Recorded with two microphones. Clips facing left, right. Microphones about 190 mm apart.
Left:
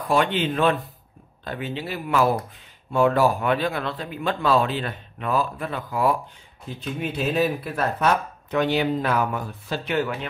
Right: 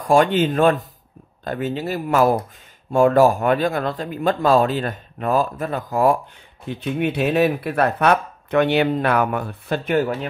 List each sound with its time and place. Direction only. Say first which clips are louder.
0.0 s speech: right 6 dB; 45° right (ahead or behind)
6.6 s speech: right 7 dB; 65° right (ahead or behind); by 10.1 s 45° right (ahead or behind)